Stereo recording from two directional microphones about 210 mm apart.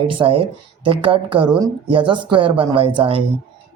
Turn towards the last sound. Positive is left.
turn(degrees=-25)  # may be behind; listen again after turning